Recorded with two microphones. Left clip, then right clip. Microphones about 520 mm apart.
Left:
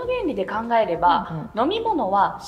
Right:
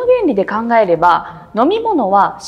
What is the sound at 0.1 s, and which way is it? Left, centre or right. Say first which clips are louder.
A woman's voice: right 11 dB; right.